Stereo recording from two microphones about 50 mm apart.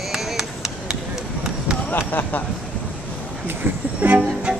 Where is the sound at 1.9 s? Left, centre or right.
Left.